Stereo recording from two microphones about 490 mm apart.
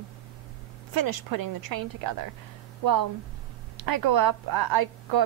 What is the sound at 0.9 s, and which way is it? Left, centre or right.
A woman's voice, right.